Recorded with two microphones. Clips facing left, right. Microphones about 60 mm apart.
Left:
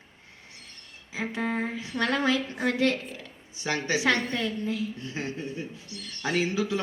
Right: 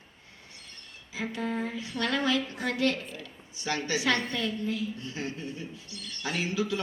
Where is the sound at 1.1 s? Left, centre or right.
Left.